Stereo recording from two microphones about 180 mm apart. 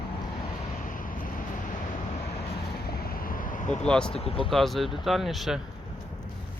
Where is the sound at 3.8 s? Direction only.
5° left (ahead or behind).